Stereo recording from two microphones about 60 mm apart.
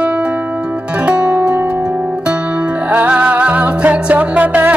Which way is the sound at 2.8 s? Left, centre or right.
Right.